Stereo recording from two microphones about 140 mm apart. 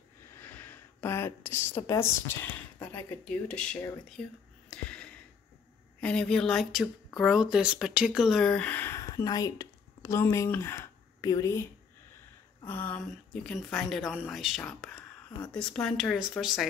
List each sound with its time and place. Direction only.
0.3 s a woman's voice: 15° left (ahead or behind)
4.6 s a sound: 5° left (ahead or behind)
5.9 s speech: 5° left (ahead or behind)
12.6 s speech: 15° left (ahead or behind); by 16.6 s 5° right (ahead or behind)